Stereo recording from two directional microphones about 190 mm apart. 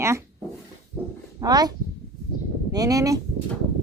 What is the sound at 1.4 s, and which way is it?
Speech, 20° right (ahead or behind).